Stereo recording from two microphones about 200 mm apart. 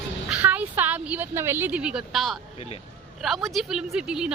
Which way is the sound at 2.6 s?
30° left (ahead or behind).